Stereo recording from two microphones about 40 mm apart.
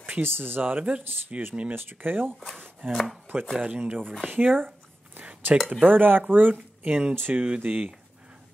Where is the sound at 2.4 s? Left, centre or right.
Centre.